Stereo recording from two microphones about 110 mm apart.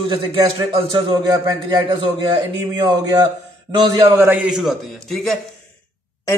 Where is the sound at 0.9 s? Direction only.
45° right (ahead or behind).